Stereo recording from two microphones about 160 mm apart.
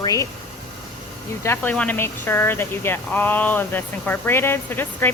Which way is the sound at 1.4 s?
15° left (ahead or behind).